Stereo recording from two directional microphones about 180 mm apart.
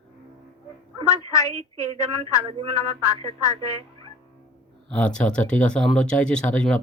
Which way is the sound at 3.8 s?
30° right (ahead or behind).